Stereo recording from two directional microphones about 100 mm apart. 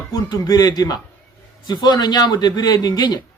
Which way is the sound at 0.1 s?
40° left (ahead or behind).